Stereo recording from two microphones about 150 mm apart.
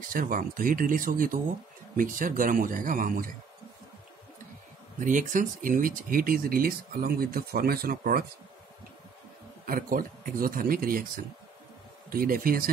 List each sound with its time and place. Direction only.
0.1 s speech: 65° right (ahead or behind)
5.0 s speech: 60° right (ahead or behind); by 8.3 s 75° right (ahead or behind)
9.7 s speech: 70° right (ahead or behind)